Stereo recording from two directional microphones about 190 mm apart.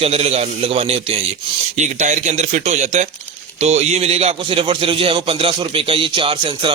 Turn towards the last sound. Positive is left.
turn(degrees=-25)  # may be behind; listen again after turning